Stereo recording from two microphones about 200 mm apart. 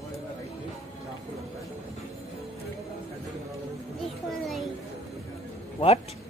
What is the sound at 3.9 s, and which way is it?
Music, centre (ahead or behind).